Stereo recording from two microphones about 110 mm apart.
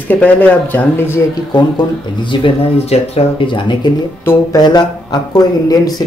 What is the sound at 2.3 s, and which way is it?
Speech, 50° left (ahead or behind).